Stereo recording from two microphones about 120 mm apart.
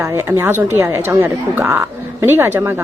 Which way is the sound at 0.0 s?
25° right (ahead or behind).